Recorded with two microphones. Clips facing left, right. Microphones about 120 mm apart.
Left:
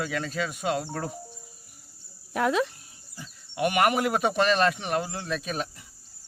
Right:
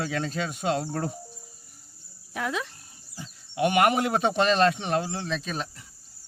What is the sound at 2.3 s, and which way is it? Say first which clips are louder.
Speech: left 6 dB; 50° left (ahead or behind).